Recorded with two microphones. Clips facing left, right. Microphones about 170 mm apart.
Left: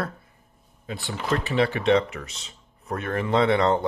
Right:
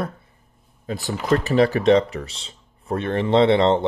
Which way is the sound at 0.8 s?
40° right (ahead or behind).